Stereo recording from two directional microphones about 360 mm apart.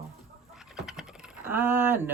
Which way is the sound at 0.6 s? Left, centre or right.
Centre.